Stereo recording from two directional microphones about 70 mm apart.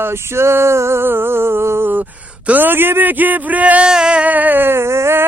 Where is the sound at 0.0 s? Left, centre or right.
Right.